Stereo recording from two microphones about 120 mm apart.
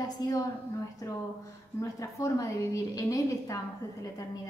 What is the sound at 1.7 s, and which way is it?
A woman's voice, 25° left (ahead or behind).